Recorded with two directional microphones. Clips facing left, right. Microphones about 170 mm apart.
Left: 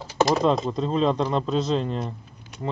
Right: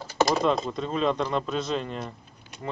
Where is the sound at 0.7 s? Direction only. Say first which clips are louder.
Left 4 dB; 35° left (ahead or behind).